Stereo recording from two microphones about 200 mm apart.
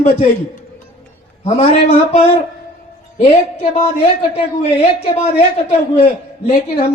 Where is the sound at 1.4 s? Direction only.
30° left (ahead or behind).